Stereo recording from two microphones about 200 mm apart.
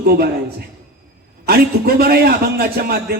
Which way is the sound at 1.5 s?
50° right (ahead or behind).